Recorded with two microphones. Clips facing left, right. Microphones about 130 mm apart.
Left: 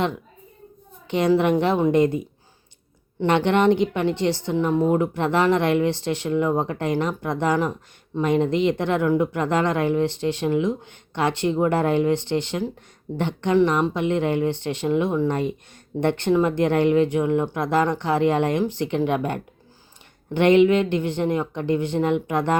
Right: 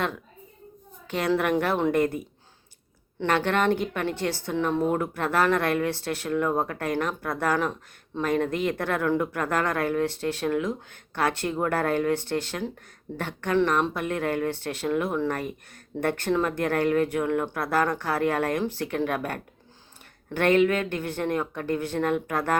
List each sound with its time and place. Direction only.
1.0 s speech: 20° left (ahead or behind)
3.2 s speech: 20° left (ahead or behind)